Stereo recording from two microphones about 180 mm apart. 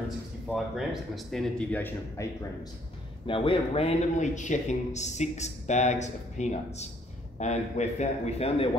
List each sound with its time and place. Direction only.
0.5 s speech: centre (ahead or behind)
3.3 s a man's voice: 30° left (ahead or behind)